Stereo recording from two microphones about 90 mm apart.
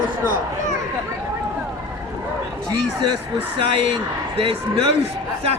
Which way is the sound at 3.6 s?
70° right (ahead or behind).